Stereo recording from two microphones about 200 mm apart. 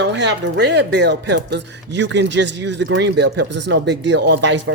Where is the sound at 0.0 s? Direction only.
60° right (ahead or behind).